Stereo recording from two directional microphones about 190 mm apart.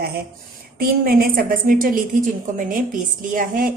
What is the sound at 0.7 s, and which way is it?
A woman's voice, 50° right (ahead or behind).